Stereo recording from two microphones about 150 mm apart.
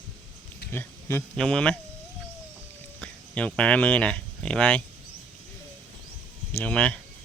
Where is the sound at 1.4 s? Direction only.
5° left (ahead or behind).